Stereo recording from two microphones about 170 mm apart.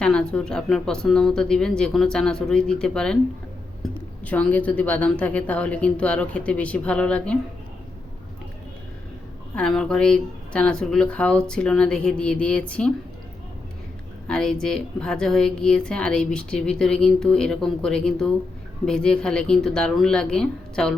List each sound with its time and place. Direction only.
0.0 s a woman's voice: 5° left (ahead or behind)
4.3 s a woman's voice: 10° left (ahead or behind)
9.6 s a woman's voice: 5° left (ahead or behind)
14.3 s a woman's voice: 5° left (ahead or behind)